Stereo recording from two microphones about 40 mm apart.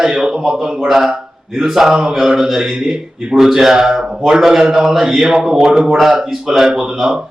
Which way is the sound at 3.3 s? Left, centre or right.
Centre.